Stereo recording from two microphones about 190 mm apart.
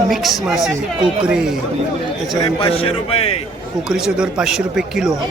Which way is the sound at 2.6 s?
30° left (ahead or behind).